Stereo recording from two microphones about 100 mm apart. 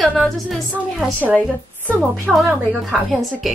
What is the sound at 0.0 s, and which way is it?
A woman's voice, centre (ahead or behind).